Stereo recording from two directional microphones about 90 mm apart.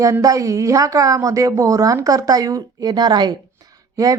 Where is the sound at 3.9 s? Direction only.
40° right (ahead or behind).